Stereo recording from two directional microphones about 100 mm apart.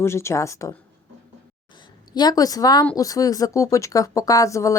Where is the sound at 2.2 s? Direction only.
40° left (ahead or behind).